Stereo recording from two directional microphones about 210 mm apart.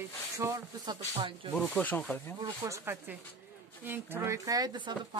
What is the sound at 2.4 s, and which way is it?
Speech, 15° right (ahead or behind).